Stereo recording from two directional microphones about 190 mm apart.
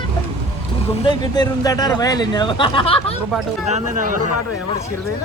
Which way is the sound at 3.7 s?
40° right (ahead or behind).